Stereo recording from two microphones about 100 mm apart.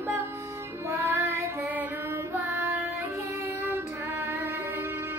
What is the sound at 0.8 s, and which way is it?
Music, 30° right (ahead or behind).